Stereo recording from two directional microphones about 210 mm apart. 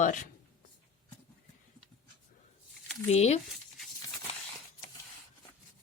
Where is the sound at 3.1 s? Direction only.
30° left (ahead or behind).